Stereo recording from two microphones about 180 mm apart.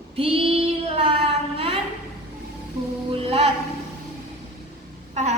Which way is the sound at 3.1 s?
35° right (ahead or behind).